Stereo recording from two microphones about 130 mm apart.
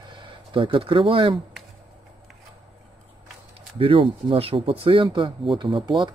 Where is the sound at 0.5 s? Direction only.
40° right (ahead or behind).